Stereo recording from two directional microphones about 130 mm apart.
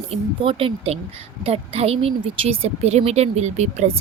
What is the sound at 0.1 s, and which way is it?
Speech, 45° right (ahead or behind).